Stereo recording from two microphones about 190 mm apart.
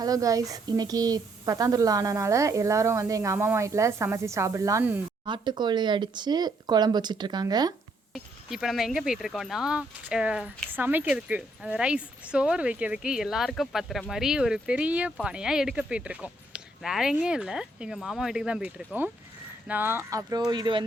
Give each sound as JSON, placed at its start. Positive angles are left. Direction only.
{"t": 0.0, "sound": "speech", "side_deg": -20}
{"t": 5.2, "sound": "speech", "side_deg": -25}
{"t": 8.1, "sound": "speech", "side_deg": 0}